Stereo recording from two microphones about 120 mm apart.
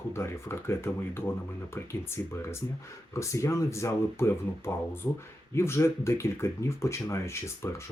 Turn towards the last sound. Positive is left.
turn(degrees=20)  # may be behind; listen again after turning